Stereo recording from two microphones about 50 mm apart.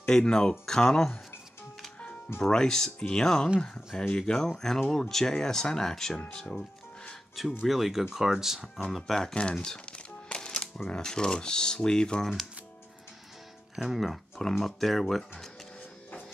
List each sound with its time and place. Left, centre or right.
0.0 s speech: centre
2.4 s speech: centre
7.6 s speech: centre
8.9 s speech: centre
9.3 s music: centre
10.9 s speech: centre
13.7 s speech: centre